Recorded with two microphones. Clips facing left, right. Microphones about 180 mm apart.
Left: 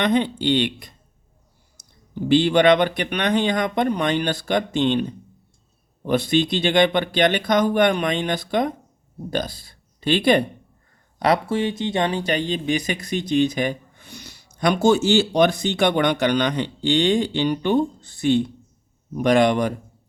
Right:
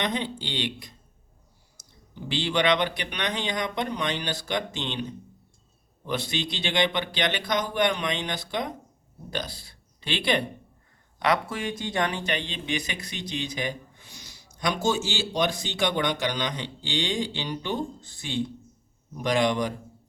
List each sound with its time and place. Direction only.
0.0 s speech: 60° left (ahead or behind)
6.1 s speech: 50° left (ahead or behind)
11.2 s speech: 30° left (ahead or behind); by 19.7 s 60° left (ahead or behind)